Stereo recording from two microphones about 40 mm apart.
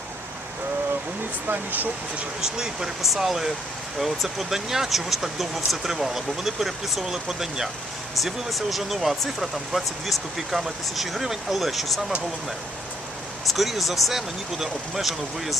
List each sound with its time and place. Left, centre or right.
1.5 s speech: right
2.4 s speech: centre
8.2 s speech: centre
13.5 s speech: centre